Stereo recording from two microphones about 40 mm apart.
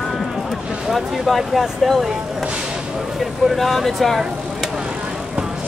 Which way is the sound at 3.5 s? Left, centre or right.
Centre.